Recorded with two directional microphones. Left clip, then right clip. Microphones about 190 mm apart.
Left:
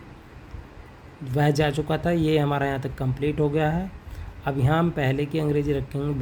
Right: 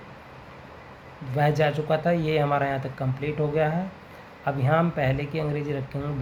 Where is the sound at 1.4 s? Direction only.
40° left (ahead or behind).